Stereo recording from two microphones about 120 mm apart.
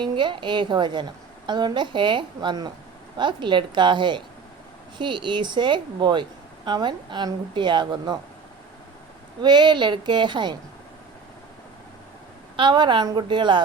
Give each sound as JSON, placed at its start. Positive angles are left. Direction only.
{"t": 0.0, "sound": "a woman's voice", "side_deg": -40}
{"t": 9.4, "sound": "a woman's voice", "side_deg": -40}
{"t": 12.5, "sound": "a woman's voice", "side_deg": -40}